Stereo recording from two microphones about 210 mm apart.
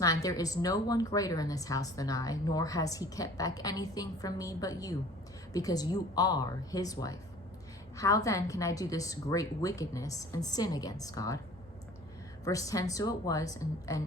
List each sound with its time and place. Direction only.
0.0 s a woman's voice: 15° left (ahead or behind)
12.5 s a woman's voice: 15° left (ahead or behind)